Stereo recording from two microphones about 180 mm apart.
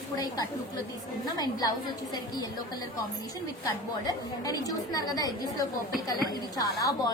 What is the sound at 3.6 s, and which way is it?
A woman's voice, 20° left (ahead or behind).